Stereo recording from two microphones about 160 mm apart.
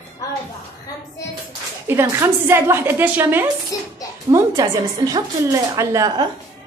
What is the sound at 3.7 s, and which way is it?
Speech, 25° left (ahead or behind).